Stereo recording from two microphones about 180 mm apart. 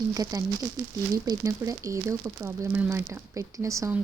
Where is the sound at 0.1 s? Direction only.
20° right (ahead or behind).